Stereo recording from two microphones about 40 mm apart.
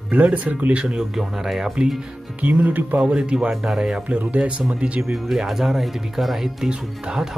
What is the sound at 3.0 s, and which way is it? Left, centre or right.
Speech, right.